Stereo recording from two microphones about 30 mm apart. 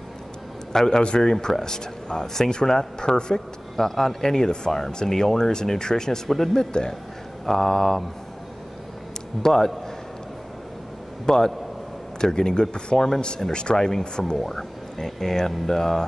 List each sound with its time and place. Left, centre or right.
0.7 s speech: centre
3.3 s speech: centre
6.2 s speech: centre
7.4 s speech: centre
9.4 s speech: centre
11.2 s speech: centre
13.7 s speech: centre